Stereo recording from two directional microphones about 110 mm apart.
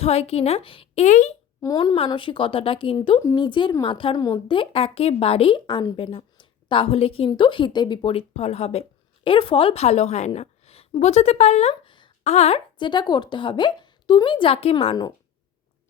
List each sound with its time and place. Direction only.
0.0 s a woman's voice: 70° left (ahead or behind); by 0.9 s 55° left (ahead or behind)
0.9 s speech: 85° left
1.6 s a woman's voice: 35° left (ahead or behind)
2.0 s a woman's voice: 50° left (ahead or behind)
3.3 s a woman's voice: 45° left (ahead or behind)
6.0 s a woman's voice: 55° left (ahead or behind)
7.3 s a woman's voice: 45° left (ahead or behind)
8.0 s a woman's voice: 65° left (ahead or behind)
9.2 s a woman's voice: 50° left (ahead or behind); by 11.7 s 75° left (ahead or behind)
11.7 s a sound: 50° left (ahead or behind)
12.2 s a woman's voice: 75° left (ahead or behind)
12.8 s a woman's voice: 45° left (ahead or behind); by 14.9 s 65° left (ahead or behind)